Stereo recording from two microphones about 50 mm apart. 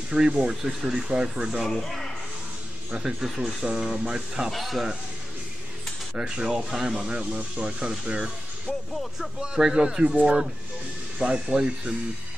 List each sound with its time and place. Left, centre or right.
0.1 s speech: centre
1.7 s speech: centre
3.6 s speech: centre
4.5 s speech: centre
6.1 s speech: centre
9.4 s speech: centre